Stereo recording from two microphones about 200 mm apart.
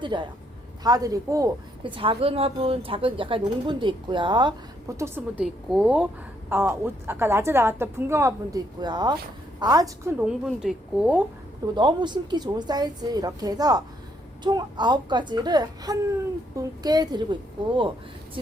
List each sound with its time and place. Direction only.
0.0 s a woman's voice: 25° right (ahead or behind); by 11.2 s 5° right (ahead or behind)
11.7 s a woman's voice: 25° right (ahead or behind)